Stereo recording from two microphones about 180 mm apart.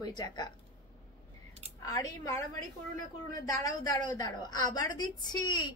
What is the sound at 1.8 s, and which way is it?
Speech, 20° left (ahead or behind).